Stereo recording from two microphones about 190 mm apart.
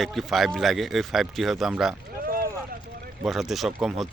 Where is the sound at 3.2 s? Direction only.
Centre (ahead or behind).